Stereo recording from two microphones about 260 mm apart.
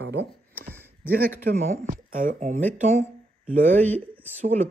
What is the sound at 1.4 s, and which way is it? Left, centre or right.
Speech, right.